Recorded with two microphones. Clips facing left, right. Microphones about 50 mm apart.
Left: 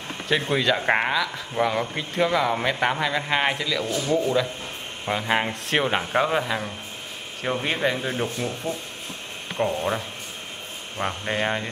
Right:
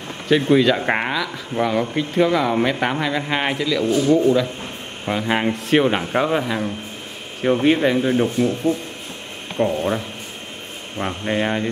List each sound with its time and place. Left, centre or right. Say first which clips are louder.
0.3 s speech: right 7 dB; centre
3.8 s speech: right 9 dB; right
5.0 s speech: right 3 dB; centre
9.6 s speech: right 4 dB; centre
11.0 s speech: right 4 dB; centre